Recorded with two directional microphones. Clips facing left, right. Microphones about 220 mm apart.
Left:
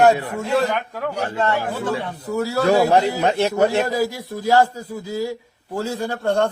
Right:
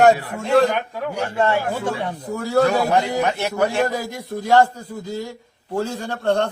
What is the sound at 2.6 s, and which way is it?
A man's voice, 25° left (ahead or behind).